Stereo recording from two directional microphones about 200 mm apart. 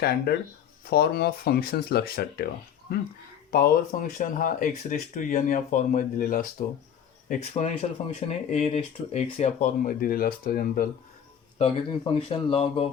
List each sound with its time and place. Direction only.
0.0 s speech: 50° left (ahead or behind)
11.5 s speech: 25° left (ahead or behind)